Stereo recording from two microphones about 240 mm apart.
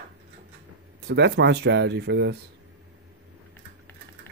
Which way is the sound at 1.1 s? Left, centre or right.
Right.